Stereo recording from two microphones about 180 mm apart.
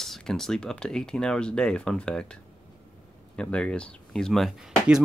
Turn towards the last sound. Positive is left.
turn(degrees=-5)  # may be behind; listen again after turning